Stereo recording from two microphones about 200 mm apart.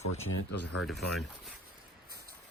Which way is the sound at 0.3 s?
80° left.